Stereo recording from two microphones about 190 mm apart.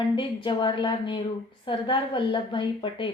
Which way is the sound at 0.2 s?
25° left (ahead or behind).